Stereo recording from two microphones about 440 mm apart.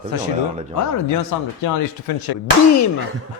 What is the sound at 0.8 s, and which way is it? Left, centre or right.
Speech, left.